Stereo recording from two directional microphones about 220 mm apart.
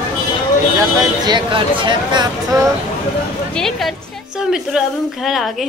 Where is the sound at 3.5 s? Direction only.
Centre (ahead or behind).